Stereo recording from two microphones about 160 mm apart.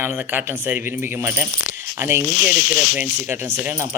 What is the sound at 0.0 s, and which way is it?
Speech, 15° right (ahead or behind).